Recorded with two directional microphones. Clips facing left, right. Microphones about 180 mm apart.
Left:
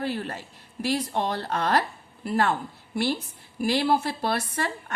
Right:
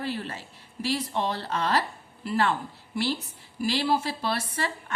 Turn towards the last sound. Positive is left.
turn(degrees=50)  # may be behind; listen again after turning